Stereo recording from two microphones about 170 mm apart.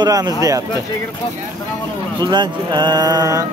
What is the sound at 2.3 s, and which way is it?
Speech, 25° right (ahead or behind).